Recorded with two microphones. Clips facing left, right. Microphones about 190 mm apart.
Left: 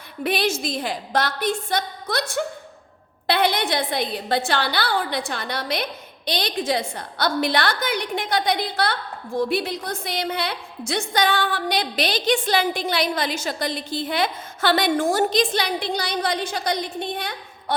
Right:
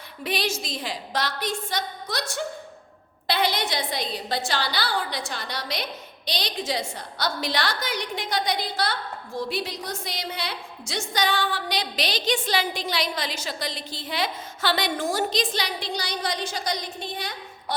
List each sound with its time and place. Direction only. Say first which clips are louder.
0.2 s a woman's voice: left 5 dB; 55° left (ahead or behind)